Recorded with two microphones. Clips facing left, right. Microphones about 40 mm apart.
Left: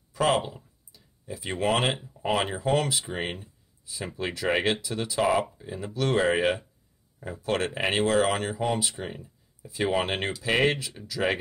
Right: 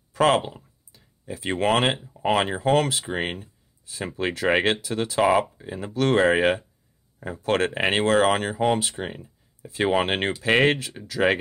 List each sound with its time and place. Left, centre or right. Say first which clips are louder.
0.1 s a sound: right 5 dB; right
0.4 s a sound: even; centre
1.2 s speech: right 4 dB; right
5.2 s speech: right 4 dB; right
5.9 s speech: right 5 dB; right
9.6 s speech: right 4 dB; right
9.8 s speech: right 4 dB; right